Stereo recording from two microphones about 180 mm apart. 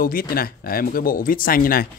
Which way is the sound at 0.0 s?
55° left (ahead or behind).